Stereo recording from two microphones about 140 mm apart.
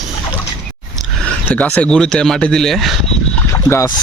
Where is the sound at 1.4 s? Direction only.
10° left (ahead or behind).